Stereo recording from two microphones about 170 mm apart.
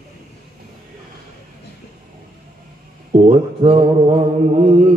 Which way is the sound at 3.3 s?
30° right (ahead or behind).